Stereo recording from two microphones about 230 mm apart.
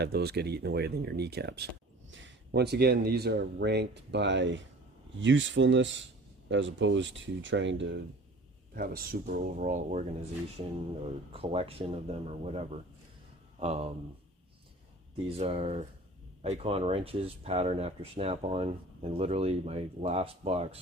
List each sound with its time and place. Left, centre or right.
0.0 s speech: right
8.7 s speech: right
11.3 s speech: right
15.4 s speech: right